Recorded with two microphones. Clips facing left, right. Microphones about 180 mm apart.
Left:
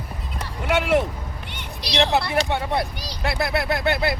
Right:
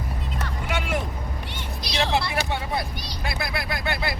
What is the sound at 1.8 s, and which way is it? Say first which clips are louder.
Speech: left 4 dB; 60° left (ahead or behind).